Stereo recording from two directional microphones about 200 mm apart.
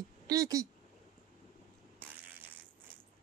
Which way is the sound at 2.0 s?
10° right (ahead or behind).